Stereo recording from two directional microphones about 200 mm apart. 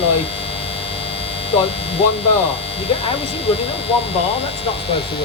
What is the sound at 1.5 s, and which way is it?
Speech, 30° left (ahead or behind).